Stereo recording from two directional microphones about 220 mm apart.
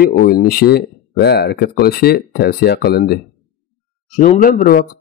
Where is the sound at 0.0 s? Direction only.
45° left (ahead or behind).